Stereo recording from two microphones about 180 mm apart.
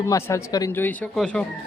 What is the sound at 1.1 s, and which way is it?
Speech, centre (ahead or behind).